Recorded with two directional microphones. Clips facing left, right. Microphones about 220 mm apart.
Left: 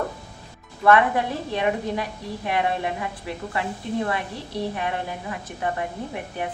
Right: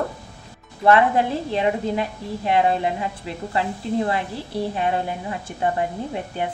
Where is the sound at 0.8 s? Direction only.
25° right (ahead or behind).